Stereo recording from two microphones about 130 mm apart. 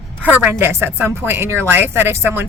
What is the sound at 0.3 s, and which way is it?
Speech, 15° right (ahead or behind).